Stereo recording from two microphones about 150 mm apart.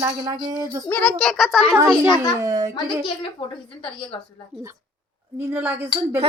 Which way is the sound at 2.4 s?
20° right (ahead or behind).